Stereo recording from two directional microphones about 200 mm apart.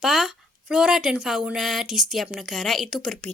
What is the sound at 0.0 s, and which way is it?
A woman's voice, centre (ahead or behind).